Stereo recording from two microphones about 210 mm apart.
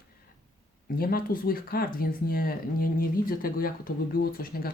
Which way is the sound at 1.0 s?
45° left (ahead or behind).